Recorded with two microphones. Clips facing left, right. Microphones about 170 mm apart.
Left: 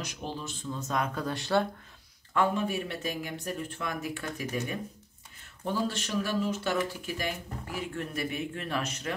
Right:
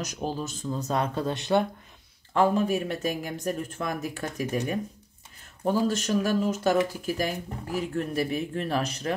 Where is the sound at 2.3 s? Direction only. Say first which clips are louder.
Right 5 dB; 35° right (ahead or behind).